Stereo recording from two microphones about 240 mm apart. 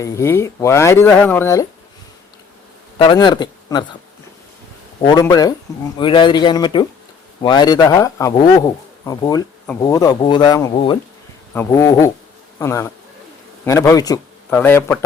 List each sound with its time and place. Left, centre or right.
0.0 s a man's voice: centre
3.0 s speech: centre
5.0 s a man's voice: centre